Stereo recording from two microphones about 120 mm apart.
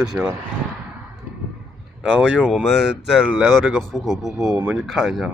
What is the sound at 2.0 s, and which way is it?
Speech, 5° right (ahead or behind).